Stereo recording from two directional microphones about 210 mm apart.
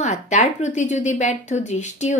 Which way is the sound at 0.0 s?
35° left (ahead or behind).